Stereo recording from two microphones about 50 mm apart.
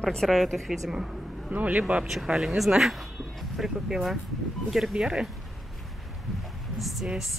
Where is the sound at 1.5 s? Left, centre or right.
Right.